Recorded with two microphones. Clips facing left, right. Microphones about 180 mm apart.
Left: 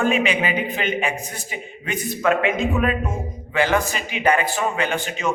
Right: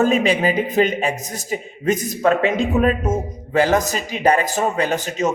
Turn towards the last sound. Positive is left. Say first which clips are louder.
# right 4 dB
turn(degrees=-40)  # may be behind; listen again after turning